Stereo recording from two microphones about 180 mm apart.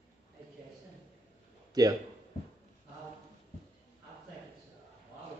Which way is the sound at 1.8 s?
20° right (ahead or behind).